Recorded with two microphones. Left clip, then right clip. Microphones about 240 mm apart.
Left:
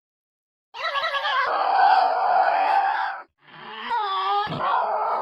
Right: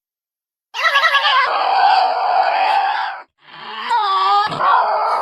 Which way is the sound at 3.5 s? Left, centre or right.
Right.